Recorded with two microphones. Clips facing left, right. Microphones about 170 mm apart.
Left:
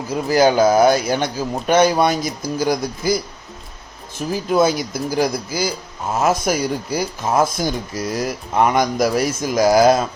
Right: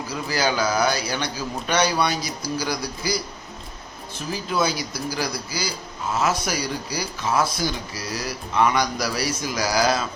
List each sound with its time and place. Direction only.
0.1 s speech: 50° left (ahead or behind)
4.3 s speech: 50° left (ahead or behind)